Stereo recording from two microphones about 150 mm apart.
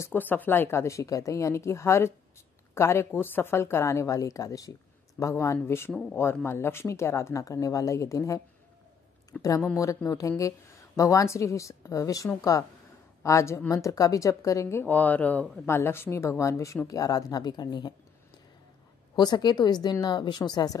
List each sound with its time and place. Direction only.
0.0 s a woman's voice: 15° left (ahead or behind)
19.1 s speech: 30° left (ahead or behind)